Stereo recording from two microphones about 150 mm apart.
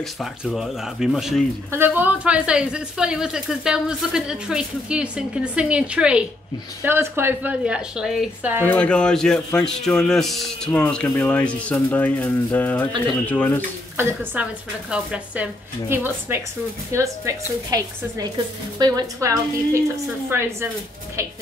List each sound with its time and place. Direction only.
0.0 s speech: centre (ahead or behind)
1.7 s speech: 15° right (ahead or behind)
8.6 s a man's voice: 10° left (ahead or behind)
13.9 s a woman's voice: 10° right (ahead or behind)